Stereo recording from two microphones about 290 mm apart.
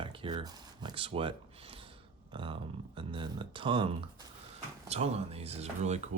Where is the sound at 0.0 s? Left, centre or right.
Centre.